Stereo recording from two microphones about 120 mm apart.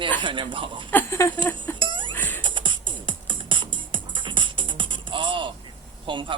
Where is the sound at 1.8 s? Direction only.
45° right (ahead or behind).